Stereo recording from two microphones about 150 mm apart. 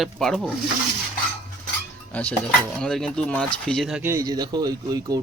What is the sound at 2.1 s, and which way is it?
Speech, 10° left (ahead or behind).